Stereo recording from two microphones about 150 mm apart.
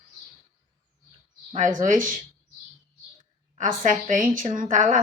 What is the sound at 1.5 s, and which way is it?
Speech, 60° right (ahead or behind).